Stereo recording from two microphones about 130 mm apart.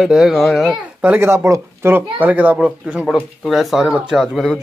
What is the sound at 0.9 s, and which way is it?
A child's voice, 15° right (ahead or behind).